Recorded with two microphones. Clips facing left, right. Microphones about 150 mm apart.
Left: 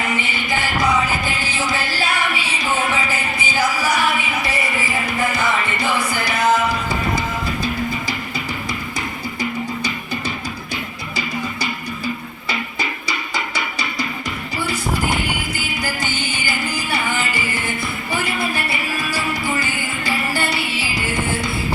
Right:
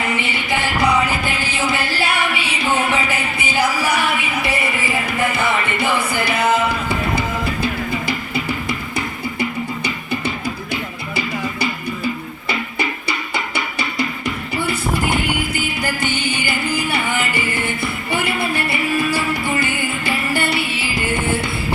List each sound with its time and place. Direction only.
0.2 s music: 65° right (ahead or behind)
5.3 s music: 60° right (ahead or behind)
12.5 s music: 60° right (ahead or behind)